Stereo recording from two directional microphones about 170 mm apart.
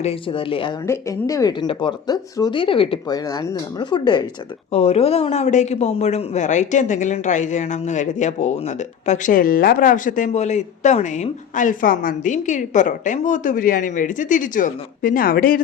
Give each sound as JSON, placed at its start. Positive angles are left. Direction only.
{"t": 0.0, "sound": "speech", "side_deg": 35}
{"t": 0.9, "sound": "speech", "side_deg": 20}
{"t": 4.7, "sound": "speech", "side_deg": 35}